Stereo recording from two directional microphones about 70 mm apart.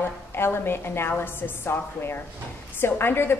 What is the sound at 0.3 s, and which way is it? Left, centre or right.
A woman's voice, left.